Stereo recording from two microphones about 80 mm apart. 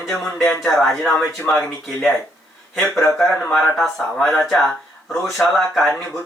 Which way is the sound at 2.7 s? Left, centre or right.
Centre.